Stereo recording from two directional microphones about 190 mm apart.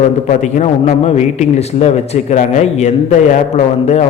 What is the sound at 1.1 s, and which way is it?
A man's voice, 35° left (ahead or behind).